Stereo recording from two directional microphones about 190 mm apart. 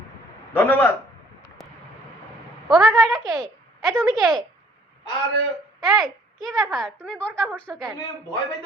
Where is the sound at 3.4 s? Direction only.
Centre (ahead or behind).